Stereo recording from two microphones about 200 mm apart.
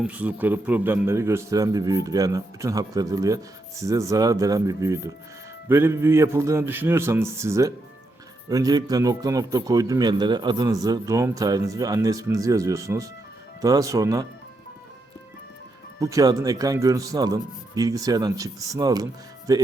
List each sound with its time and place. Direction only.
0.0 s a man's voice: 5° right (ahead or behind)
16.0 s a man's voice: 15° right (ahead or behind)